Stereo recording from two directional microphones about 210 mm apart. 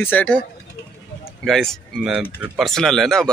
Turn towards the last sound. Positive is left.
turn(degrees=0)  # may be behind; listen again after turning